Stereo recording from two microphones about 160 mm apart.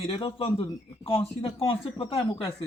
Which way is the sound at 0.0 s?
35° left (ahead or behind).